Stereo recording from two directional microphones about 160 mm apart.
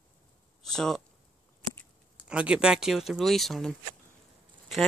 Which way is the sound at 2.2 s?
5° right (ahead or behind).